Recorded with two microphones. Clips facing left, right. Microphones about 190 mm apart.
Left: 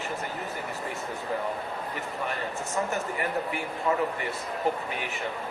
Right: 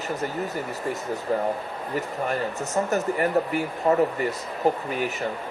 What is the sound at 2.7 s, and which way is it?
Speech, 40° right (ahead or behind).